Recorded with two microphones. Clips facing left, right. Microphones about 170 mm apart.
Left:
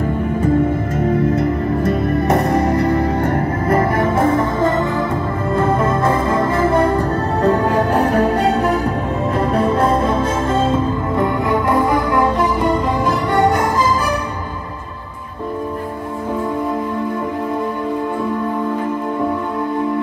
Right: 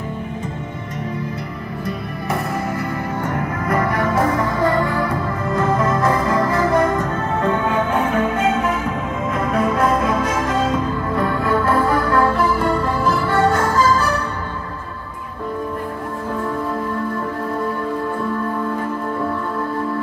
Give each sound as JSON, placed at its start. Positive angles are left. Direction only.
{"t": 1.3, "sound": "music", "side_deg": 45}